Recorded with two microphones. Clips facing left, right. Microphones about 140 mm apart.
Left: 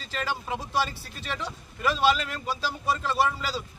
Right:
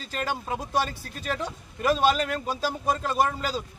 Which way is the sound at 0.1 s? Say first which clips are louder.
Right 1 dB; 45° right (ahead or behind).